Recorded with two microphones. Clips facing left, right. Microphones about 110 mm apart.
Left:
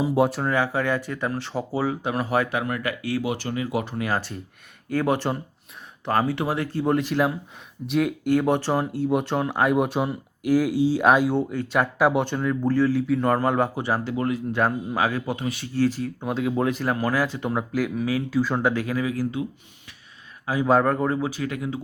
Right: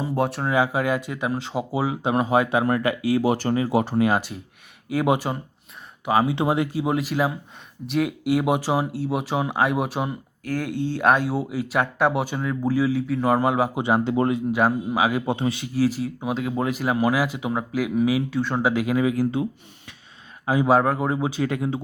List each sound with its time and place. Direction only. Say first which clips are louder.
0.0 s speech: left 3 dB; 5° left (ahead or behind)
0.5 s speech: right 2 dB; 15° right (ahead or behind)
3.3 s speech: right 5 dB; 35° right (ahead or behind)
4.1 s speech: right 3 dB; 15° right (ahead or behind)
6.3 s speech: right 4 dB; 20° right (ahead or behind)
6.7 s speech: left 1 dB; 5° right (ahead or behind)
13.7 s speech: right 4 dB; 20° right (ahead or behind)
14.5 s speech: right 2 dB; 10° right (ahead or behind)
15.3 s speech: right 4 dB; 25° right (ahead or behind)
15.6 s speech: left 2 dB; 10° right (ahead or behind)
17.9 s speech: right 4 dB; 15° right (ahead or behind)
18.3 s speech: left 1 dB; centre (ahead or behind)
18.7 s speech: right 4 dB; 15° right (ahead or behind)
20.7 s speech: left 1 dB; 5° right (ahead or behind); by 21.8 s 25° right (ahead or behind)